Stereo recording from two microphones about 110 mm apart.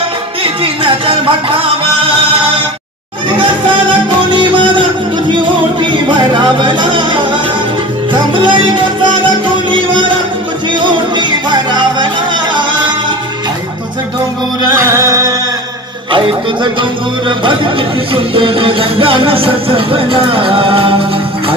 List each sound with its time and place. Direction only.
0.4 s music: 50° right (ahead or behind)
4.3 s music: 45° right (ahead or behind)
14.8 s music: 30° right (ahead or behind)
18.1 s music: 50° right (ahead or behind)